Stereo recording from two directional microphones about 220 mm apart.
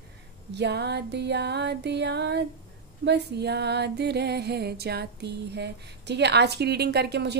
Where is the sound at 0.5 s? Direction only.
50° right (ahead or behind).